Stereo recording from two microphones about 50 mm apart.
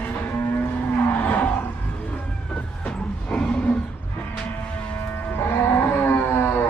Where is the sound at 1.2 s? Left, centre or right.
Left.